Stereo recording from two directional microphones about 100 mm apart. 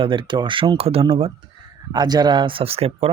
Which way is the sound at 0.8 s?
75° right (ahead or behind).